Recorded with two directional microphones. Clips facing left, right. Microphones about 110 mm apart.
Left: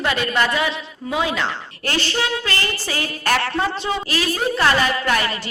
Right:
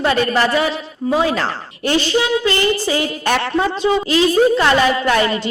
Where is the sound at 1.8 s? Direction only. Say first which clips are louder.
Right 6 dB; 15° right (ahead or behind).